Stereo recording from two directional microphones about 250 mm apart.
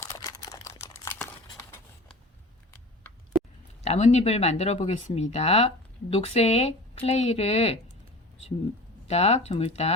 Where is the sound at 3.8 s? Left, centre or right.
Left.